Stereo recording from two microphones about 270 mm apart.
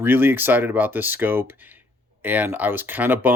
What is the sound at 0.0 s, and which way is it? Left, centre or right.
Speech, centre.